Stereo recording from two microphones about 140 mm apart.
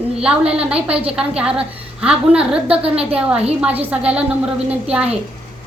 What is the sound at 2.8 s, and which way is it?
Speech, 45° right (ahead or behind).